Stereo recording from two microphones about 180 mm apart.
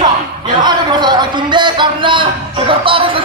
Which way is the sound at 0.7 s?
25° right (ahead or behind).